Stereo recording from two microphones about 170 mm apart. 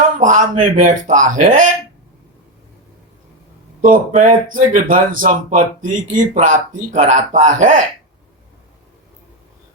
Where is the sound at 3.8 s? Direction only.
50° right (ahead or behind).